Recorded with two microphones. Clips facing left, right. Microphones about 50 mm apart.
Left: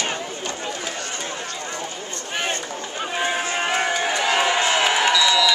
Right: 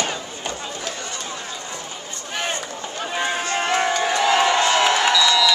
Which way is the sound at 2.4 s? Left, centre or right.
Centre.